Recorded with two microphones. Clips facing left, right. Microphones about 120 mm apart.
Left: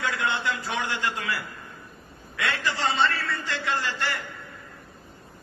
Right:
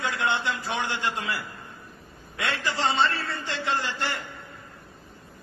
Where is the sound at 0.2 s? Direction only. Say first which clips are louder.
Right 1 dB; 25° right (ahead or behind).